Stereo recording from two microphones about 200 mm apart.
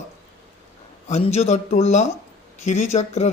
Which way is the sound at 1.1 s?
30° left (ahead or behind).